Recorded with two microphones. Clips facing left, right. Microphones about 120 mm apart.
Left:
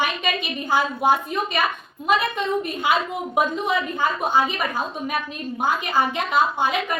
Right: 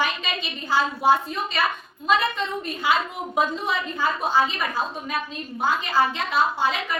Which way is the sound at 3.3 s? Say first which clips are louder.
Left 2 dB; 15° left (ahead or behind).